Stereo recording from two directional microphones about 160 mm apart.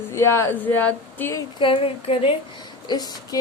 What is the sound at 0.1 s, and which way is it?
A woman's voice, 15° left (ahead or behind).